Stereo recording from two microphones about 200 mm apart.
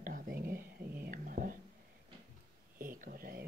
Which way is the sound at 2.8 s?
45° right (ahead or behind).